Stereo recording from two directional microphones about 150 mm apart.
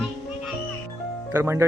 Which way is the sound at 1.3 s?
15° right (ahead or behind).